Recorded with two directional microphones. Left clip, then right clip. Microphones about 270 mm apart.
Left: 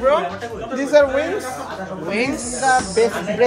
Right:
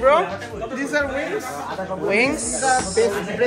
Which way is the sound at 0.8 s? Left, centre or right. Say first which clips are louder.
Left 9 dB; centre.